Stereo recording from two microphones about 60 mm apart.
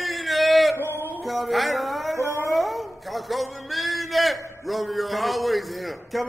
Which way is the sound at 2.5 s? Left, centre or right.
Centre.